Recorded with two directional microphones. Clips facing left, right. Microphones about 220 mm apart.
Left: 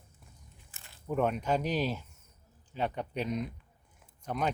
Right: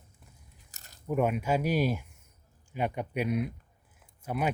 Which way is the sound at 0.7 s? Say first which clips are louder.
Right 1 dB; 40° right (ahead or behind).